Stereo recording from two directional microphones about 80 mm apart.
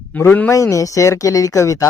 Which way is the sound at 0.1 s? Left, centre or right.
Centre.